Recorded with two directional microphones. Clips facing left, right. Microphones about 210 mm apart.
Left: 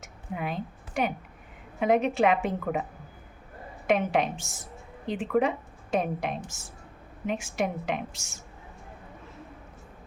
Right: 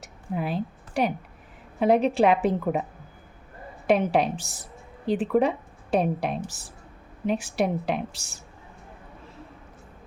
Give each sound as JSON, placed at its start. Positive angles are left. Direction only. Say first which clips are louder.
{"t": 0.0, "sound": "a sound", "louder": "right 4 dB", "side_deg": -35}
{"t": 1.8, "sound": "a woman's voice", "louder": "right 3 dB", "side_deg": -35}
{"t": 3.8, "sound": "a woman's voice", "louder": "right 3 dB", "side_deg": -35}